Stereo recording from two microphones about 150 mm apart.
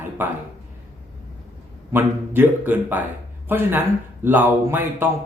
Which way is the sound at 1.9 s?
15° right (ahead or behind).